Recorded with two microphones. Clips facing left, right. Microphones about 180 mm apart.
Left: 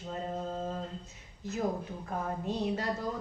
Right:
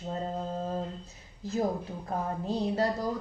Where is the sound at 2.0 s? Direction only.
35° right (ahead or behind).